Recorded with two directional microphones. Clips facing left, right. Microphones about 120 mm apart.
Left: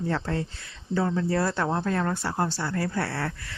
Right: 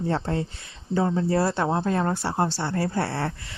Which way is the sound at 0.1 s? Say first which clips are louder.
Right 3 dB; 25° right (ahead or behind).